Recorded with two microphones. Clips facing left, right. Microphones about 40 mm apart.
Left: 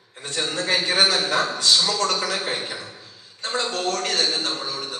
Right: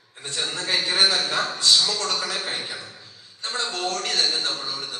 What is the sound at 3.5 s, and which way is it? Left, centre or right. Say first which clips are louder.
Speech: left 3 dB; left.